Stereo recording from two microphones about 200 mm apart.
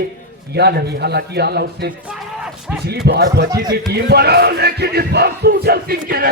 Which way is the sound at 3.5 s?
20° right (ahead or behind).